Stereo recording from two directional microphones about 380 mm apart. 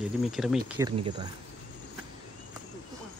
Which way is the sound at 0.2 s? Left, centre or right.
Centre.